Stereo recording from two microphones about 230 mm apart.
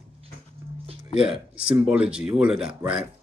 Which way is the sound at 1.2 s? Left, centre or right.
Centre.